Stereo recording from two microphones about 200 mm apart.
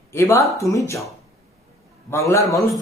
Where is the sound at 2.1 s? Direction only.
15° left (ahead or behind).